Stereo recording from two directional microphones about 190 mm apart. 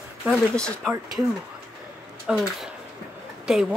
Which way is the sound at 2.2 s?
Centre (ahead or behind).